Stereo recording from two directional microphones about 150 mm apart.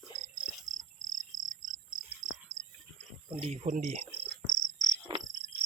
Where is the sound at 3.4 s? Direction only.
45° right (ahead or behind).